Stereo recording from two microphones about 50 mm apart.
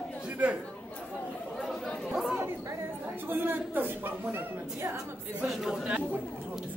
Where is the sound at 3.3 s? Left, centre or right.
Right.